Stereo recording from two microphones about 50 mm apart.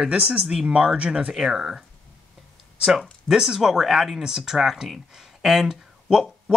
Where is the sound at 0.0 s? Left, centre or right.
Centre.